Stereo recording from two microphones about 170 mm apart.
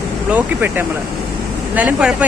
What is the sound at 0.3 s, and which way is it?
Speech, 10° right (ahead or behind).